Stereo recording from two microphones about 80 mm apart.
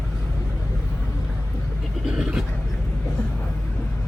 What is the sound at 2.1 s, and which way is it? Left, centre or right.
Vehicle, centre.